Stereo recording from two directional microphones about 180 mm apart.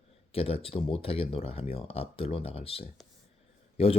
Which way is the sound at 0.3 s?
30° left (ahead or behind).